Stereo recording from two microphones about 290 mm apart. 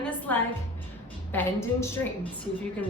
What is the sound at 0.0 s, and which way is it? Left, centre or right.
Music, centre.